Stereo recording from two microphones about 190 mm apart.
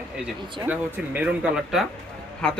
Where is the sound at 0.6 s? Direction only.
10° right (ahead or behind).